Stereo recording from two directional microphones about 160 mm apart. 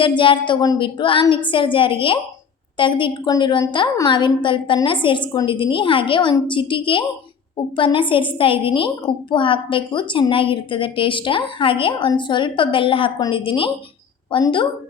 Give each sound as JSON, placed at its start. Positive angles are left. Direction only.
{"t": 0.2, "sound": "a woman's voice", "side_deg": 30}